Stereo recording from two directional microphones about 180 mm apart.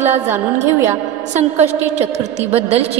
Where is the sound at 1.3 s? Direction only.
40° right (ahead or behind).